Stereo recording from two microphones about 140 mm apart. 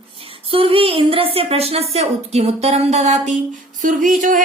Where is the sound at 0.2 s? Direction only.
40° right (ahead or behind).